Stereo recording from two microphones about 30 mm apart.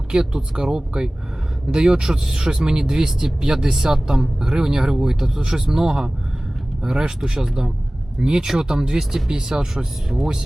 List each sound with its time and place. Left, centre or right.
0.1 s speech: right
7.3 s speech: right